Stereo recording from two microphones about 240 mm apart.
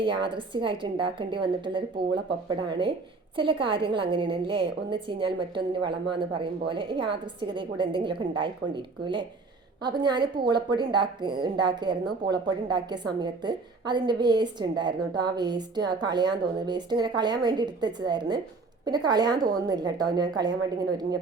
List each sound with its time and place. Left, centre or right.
0.0 s a woman's voice: centre